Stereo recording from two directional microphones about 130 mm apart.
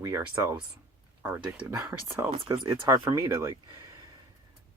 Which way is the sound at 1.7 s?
20° right (ahead or behind).